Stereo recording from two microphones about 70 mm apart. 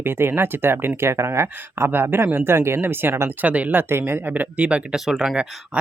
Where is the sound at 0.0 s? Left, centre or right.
Right.